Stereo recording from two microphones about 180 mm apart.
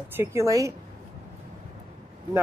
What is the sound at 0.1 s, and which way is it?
Speech, 15° right (ahead or behind).